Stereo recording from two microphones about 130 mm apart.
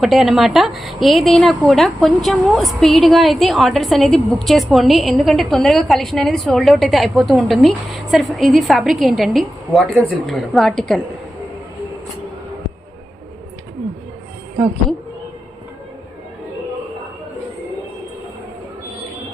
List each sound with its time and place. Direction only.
0.0 s a woman's voice: centre (ahead or behind)